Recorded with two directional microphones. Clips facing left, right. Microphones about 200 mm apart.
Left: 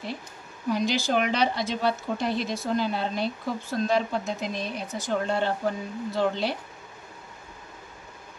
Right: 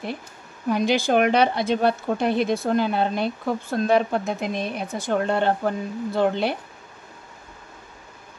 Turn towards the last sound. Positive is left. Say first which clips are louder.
# right 4 dB
turn(degrees=-55)  # may be behind; listen again after turning